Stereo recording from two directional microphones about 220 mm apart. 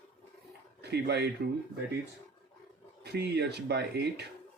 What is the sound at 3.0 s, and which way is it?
Speech, 50° right (ahead or behind).